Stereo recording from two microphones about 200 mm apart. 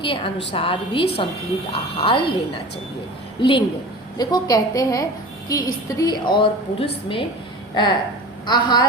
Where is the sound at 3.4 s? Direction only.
25° left (ahead or behind).